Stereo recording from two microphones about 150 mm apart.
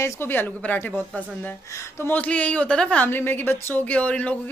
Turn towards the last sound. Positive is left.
turn(degrees=10)  # may be behind; listen again after turning